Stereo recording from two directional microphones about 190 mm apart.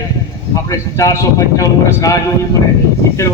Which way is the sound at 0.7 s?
15° left (ahead or behind).